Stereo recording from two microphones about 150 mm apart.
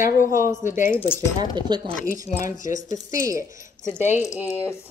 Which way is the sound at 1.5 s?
30° right (ahead or behind).